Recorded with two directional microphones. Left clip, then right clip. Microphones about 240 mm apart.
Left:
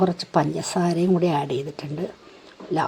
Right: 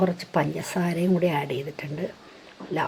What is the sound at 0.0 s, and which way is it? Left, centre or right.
A woman's voice, centre.